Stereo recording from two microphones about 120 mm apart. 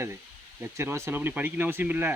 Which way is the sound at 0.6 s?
20° right (ahead or behind).